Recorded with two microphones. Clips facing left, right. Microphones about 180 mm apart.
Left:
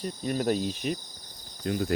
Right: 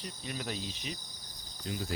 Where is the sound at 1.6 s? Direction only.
60° left (ahead or behind).